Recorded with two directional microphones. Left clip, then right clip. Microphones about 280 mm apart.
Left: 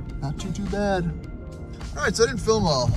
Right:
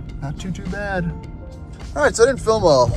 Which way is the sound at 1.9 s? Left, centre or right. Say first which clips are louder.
Right 7 dB; centre.